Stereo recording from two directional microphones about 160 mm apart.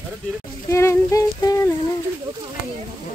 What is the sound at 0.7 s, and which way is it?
Music, 15° left (ahead or behind).